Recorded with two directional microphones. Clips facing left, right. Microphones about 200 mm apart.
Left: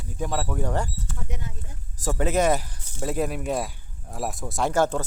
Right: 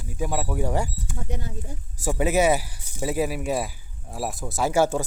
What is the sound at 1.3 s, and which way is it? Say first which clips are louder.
Speech: right 5 dB; 35° right (ahead or behind).